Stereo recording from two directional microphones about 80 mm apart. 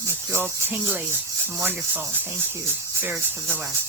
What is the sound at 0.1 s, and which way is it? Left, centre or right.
Music, right.